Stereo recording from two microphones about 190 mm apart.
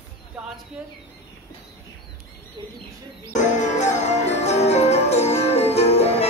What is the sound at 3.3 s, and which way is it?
Music, 40° left (ahead or behind).